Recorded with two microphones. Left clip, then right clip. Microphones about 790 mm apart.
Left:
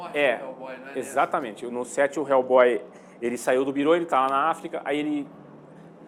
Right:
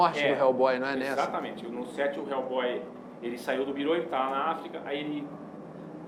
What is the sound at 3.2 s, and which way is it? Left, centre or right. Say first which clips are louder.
Speech: left 8 dB; left.